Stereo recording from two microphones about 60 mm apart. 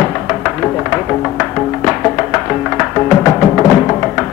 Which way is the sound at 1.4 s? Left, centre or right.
Centre.